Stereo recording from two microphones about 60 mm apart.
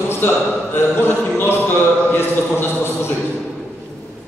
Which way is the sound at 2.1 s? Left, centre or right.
Left.